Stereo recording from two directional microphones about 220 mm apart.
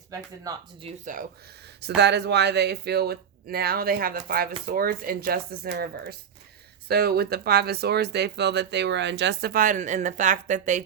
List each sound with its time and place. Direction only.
0.1 s speech: 15° right (ahead or behind)
0.9 s speech: 35° right (ahead or behind)
2.0 s speech: 50° right (ahead or behind); by 10.8 s 35° right (ahead or behind)